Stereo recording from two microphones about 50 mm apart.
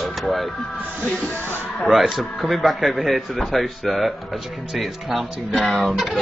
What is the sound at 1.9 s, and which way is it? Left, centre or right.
Speech, centre.